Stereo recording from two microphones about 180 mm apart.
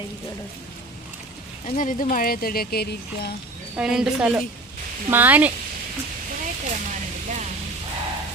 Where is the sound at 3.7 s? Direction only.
5° right (ahead or behind).